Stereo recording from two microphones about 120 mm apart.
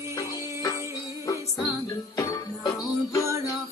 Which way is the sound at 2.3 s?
30° left (ahead or behind).